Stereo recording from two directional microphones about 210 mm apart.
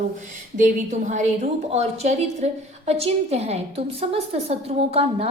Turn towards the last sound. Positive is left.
turn(degrees=-30)  # may be behind; listen again after turning